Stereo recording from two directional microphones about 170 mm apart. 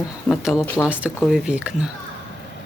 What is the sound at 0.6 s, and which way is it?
Speech, 10° left (ahead or behind).